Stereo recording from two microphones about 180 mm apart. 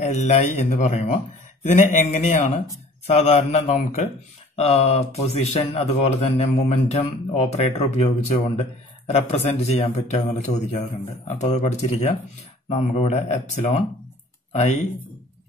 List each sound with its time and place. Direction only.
0.0 s speech: 35° left (ahead or behind)